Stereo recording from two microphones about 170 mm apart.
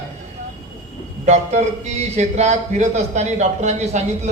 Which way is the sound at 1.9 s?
40° right (ahead or behind).